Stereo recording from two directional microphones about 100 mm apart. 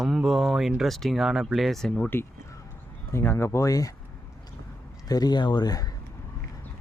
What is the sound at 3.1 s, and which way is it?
Speech, 25° left (ahead or behind).